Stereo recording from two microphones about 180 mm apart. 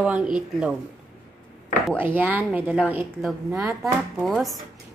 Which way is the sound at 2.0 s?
10° right (ahead or behind).